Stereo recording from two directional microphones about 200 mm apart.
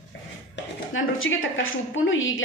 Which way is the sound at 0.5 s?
75° left (ahead or behind).